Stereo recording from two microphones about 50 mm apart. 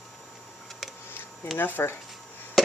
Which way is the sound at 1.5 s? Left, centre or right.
Left.